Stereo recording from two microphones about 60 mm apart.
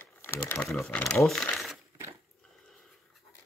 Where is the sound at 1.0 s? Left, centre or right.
Centre.